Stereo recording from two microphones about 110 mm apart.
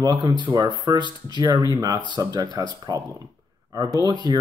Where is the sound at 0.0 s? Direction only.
40° right (ahead or behind).